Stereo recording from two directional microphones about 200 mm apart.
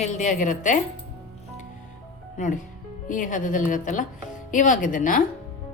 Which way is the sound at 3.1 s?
40° left (ahead or behind).